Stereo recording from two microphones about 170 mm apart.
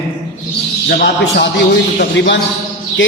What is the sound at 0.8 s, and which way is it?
Speech, 65° left (ahead or behind).